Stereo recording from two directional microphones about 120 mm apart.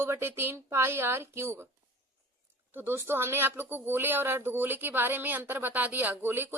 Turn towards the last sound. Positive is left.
turn(degrees=-15)  # may be behind; listen again after turning